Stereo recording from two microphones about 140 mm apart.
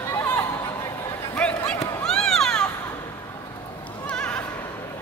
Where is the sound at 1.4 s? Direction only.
5° left (ahead or behind).